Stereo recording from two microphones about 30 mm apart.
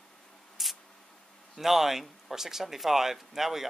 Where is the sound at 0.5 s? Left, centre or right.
Centre.